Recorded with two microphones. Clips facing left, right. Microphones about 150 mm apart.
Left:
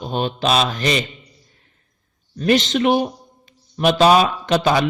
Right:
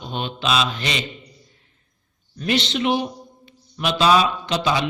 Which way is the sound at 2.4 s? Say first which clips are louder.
Left 5 dB; 45° left (ahead or behind).